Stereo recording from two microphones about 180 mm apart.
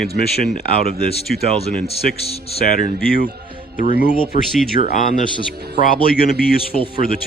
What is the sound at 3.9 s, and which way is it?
Speech, 55° left (ahead or behind).